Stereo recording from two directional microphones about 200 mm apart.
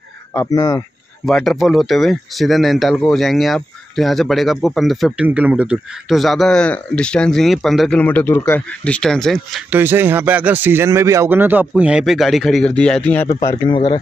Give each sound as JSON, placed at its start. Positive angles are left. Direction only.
{"t": 0.3, "sound": "speech", "side_deg": 15}
{"t": 1.2, "sound": "speech", "side_deg": 0}
{"t": 9.8, "sound": "speech", "side_deg": -10}